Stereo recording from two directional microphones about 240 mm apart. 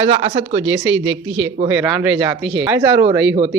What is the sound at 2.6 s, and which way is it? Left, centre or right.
Speech, centre.